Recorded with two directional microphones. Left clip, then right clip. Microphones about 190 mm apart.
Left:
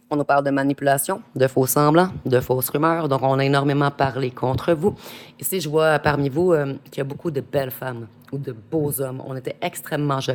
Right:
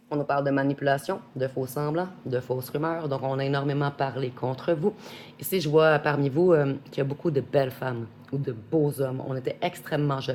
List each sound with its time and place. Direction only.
0.1 s speech: 50° left (ahead or behind); by 10.3 s 35° left (ahead or behind)